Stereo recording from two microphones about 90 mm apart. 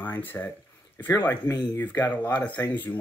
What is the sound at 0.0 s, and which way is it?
Speech, 20° left (ahead or behind).